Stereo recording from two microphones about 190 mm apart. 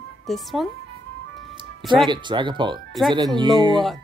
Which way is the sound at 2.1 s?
25° right (ahead or behind).